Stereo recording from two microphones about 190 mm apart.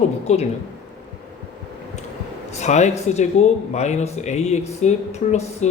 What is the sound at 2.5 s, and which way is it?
Speech, 35° left (ahead or behind).